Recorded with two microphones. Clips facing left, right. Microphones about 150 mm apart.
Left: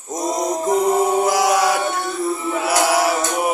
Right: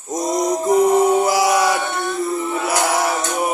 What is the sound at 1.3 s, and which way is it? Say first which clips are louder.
Music: even; centre (ahead or behind).